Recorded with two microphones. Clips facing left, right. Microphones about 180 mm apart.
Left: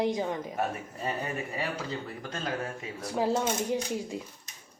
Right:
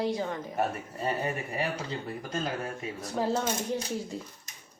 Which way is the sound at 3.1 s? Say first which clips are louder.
Left 1 dB; 10° left (ahead or behind).